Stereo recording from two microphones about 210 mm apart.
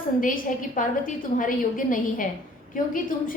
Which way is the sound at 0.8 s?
40° left (ahead or behind).